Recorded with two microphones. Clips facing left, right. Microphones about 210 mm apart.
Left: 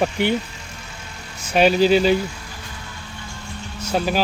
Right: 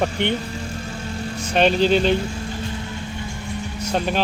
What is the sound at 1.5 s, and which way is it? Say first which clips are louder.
Speech: left 2 dB; 5° left (ahead or behind).